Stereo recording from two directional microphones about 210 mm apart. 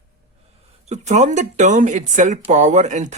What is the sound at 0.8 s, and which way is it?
Speech, 35° right (ahead or behind).